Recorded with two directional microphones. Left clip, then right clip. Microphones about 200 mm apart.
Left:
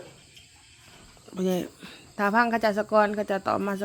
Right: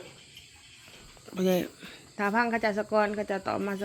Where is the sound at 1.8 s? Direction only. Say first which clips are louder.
Left 4 dB; 25° left (ahead or behind).